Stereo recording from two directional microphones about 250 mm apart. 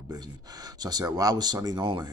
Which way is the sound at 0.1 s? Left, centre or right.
Centre.